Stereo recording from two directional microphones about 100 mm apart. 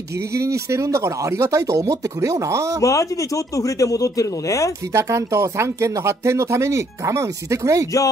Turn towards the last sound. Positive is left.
turn(degrees=-30)  # may be behind; listen again after turning